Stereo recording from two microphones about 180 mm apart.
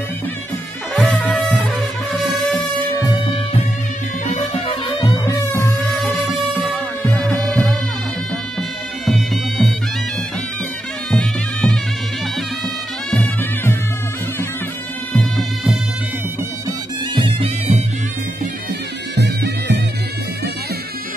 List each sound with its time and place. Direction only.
0.9 s music: 5° left (ahead or behind)
4.3 s music: 35° left (ahead or behind)
5.1 s music: 20° left (ahead or behind)
6.0 s music: centre (ahead or behind)
11.1 s music: 5° left (ahead or behind)
13.1 s music: 10° left (ahead or behind)
15.3 s music: 5° right (ahead or behind)
16.6 s music: 25° right (ahead or behind)
19.1 s music: 65° right (ahead or behind)